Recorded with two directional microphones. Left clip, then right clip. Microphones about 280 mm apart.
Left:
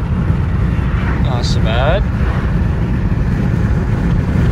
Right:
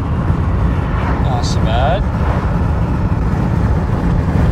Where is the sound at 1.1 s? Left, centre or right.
Centre.